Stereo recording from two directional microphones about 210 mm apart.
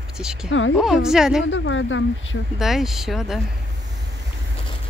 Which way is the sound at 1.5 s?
65° left (ahead or behind).